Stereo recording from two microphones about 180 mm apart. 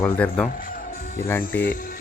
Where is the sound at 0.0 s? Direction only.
5° left (ahead or behind).